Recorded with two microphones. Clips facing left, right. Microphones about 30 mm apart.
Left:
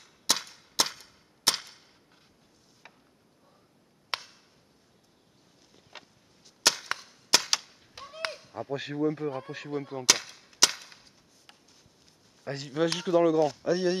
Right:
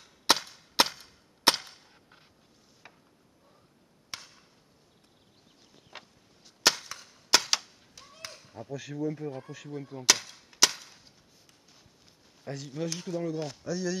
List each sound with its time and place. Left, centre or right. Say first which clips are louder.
0.3 s cap gun: right 4 dB; right
0.8 s chop: right 4 dB; right
1.5 s cap gun: right 4 dB; right
2.8 s a sound: even; centre
4.1 s chop: left 8 dB; left
5.7 s arrow: right 1 dB; centre
7.2 s cap gun: right 1 dB; centre
7.9 s a sound: left 10 dB; left
8.3 s chop: left 5 dB; left
8.6 s speech: left 4 dB; left
10.5 s chop: even; centre
12.5 s speech: left 7 dB; left
13.4 s speech: left 11 dB; centre
13.7 s speech: left 6 dB; left